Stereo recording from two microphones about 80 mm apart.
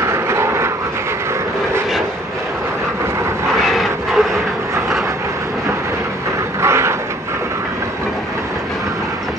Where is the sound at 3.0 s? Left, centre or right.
Right.